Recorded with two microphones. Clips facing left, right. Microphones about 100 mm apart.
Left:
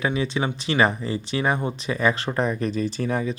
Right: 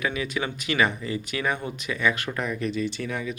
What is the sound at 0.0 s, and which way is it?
Speech, 30° left (ahead or behind).